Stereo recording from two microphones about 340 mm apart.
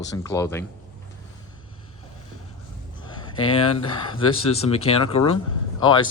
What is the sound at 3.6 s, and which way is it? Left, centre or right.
Speech, left.